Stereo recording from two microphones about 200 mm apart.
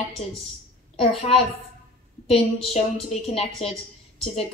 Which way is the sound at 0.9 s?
30° left (ahead or behind).